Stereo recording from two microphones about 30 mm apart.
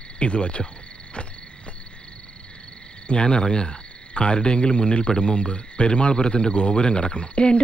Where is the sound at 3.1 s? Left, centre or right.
Left.